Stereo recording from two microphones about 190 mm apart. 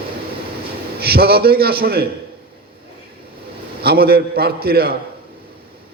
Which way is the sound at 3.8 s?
55° right (ahead or behind).